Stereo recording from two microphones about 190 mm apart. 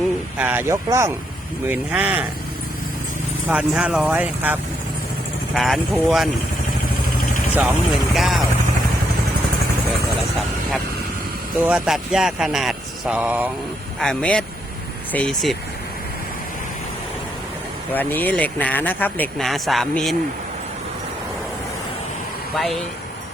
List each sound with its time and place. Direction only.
0.3 s speech: 10° right (ahead or behind)
3.5 s speech: 5° right (ahead or behind)
7.5 s speech: 5° right (ahead or behind)
11.6 s speech: 5° right (ahead or behind)
14.0 s speech: 5° left (ahead or behind)
17.9 s speech: 10° left (ahead or behind)
22.5 s speech: centre (ahead or behind)